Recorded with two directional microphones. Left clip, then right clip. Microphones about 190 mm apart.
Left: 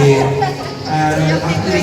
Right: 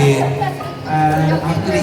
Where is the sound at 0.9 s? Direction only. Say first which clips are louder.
Even; 20° right (ahead or behind).